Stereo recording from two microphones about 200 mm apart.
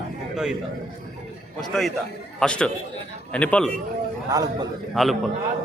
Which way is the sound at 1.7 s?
Centre (ahead or behind).